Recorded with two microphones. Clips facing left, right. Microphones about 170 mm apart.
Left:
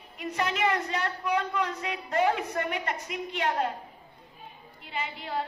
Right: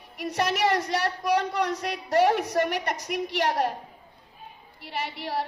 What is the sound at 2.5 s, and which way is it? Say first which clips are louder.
Speech: right 5 dB; 80° right.